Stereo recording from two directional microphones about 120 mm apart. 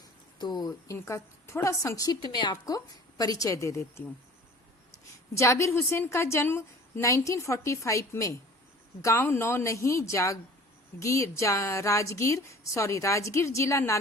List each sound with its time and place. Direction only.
0.3 s speech: 35° left (ahead or behind)
0.9 s a woman's voice: 20° left (ahead or behind)
5.3 s a woman's voice: 25° left (ahead or behind)